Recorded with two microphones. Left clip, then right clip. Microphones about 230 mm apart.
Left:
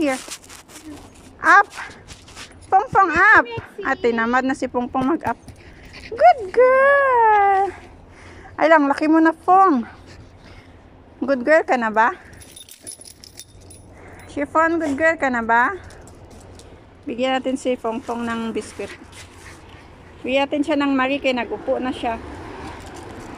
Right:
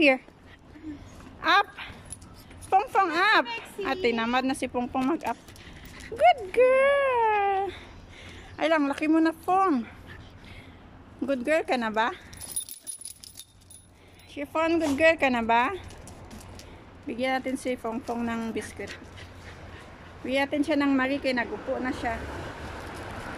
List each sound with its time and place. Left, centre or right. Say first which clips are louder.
1.4 s speech: left 9 dB; centre
11.2 s speech: left 9 dB; centre
14.3 s speech: left 8 dB; centre
17.1 s speech: left 7 dB; centre
20.2 s speech: left 6 dB; centre